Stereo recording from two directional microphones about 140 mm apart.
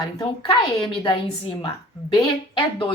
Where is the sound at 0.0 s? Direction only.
30° left (ahead or behind).